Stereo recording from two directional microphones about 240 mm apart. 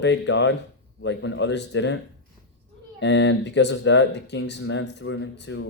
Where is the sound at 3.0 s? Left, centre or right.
Left.